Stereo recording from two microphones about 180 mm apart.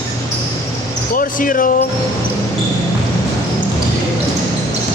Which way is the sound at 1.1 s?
50° left (ahead or behind).